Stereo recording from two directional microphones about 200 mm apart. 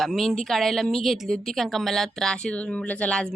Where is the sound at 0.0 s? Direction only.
Centre (ahead or behind).